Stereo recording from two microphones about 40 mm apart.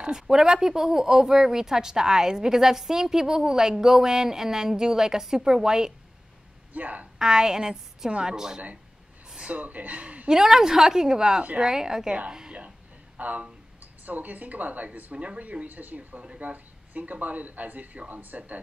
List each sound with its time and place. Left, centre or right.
0.0 s speech: centre
6.7 s a woman's voice: right
7.2 s a woman's voice: centre
9.5 s speech: right
10.3 s a woman's voice: centre
13.2 s speech: right
15.6 s speech: right